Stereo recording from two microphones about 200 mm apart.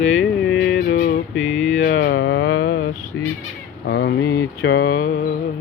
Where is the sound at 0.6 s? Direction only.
55° left (ahead or behind).